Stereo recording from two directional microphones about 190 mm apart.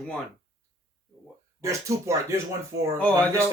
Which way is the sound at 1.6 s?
15° right (ahead or behind).